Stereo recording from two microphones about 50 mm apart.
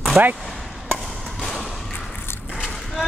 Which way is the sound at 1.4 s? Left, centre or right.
Centre.